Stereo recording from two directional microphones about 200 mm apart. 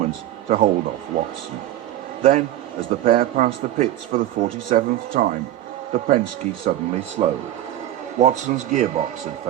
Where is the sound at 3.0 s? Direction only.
45° right (ahead or behind).